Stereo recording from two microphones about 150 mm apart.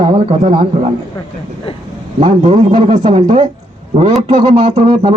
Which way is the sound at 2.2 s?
50° right (ahead or behind).